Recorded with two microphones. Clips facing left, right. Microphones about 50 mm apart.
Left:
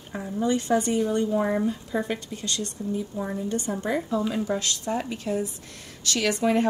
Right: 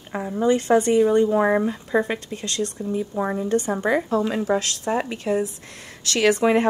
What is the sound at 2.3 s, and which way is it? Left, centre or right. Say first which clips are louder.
Speech: right 5 dB; right.